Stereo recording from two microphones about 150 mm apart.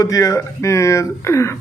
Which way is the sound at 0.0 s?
25° left (ahead or behind).